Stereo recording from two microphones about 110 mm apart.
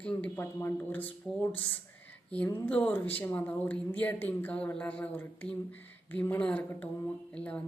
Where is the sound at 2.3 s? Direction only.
15° left (ahead or behind).